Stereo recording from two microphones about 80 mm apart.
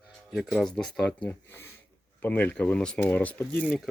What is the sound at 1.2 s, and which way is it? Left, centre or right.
Speech, left.